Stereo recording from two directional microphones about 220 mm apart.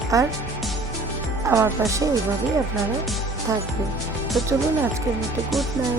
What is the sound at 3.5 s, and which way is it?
Speech, 15° right (ahead or behind).